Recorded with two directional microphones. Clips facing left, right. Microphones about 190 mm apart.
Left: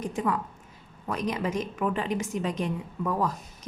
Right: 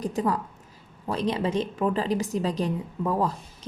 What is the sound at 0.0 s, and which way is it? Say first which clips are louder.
A woman's voice: right 2 dB; 35° right (ahead or behind).